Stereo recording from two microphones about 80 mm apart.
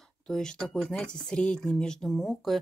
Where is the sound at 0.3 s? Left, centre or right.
Centre.